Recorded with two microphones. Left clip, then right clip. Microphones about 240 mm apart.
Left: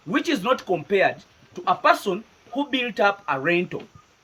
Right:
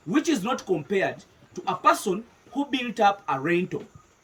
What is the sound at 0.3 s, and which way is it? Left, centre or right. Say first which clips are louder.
Speech: left 3 dB; centre.